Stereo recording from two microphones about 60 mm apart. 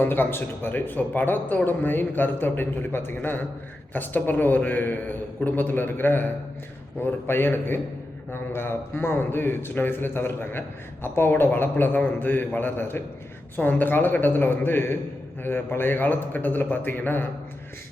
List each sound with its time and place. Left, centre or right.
0.0 s a man's voice: left